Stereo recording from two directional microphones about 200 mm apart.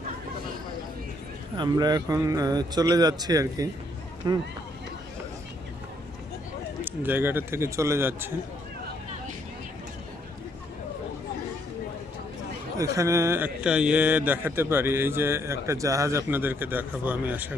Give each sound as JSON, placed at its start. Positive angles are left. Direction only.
{"t": 1.5, "sound": "a man's voice", "side_deg": -20}
{"t": 6.8, "sound": "speech", "side_deg": -10}
{"t": 12.8, "sound": "speech", "side_deg": -15}